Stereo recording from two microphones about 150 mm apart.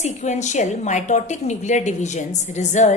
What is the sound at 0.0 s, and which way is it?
A woman's voice, 50° left (ahead or behind).